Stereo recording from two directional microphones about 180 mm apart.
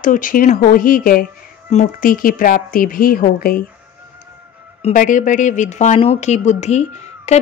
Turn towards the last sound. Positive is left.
turn(degrees=40)  # may be behind; listen again after turning